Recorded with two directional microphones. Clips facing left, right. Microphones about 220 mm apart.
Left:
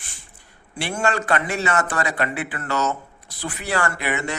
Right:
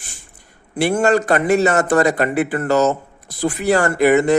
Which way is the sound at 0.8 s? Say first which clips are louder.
Right 9 dB; 45° right (ahead or behind).